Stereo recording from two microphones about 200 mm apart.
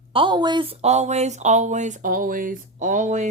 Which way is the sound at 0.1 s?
25° right (ahead or behind).